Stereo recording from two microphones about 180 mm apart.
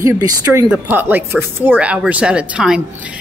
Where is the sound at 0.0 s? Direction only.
15° right (ahead or behind).